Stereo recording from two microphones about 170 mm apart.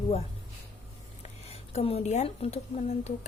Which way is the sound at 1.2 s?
35° left (ahead or behind).